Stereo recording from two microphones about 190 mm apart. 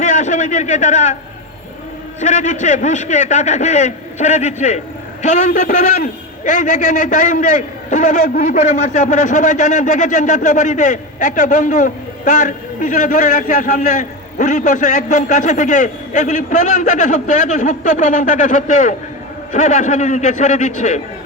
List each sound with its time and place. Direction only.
0.0 s a man's voice: 40° left (ahead or behind)
2.2 s a man's voice: 40° left (ahead or behind)